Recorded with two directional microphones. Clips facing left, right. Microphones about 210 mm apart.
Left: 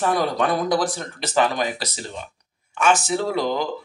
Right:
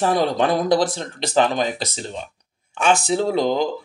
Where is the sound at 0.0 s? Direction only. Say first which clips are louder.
Right 2 dB; 30° right (ahead or behind).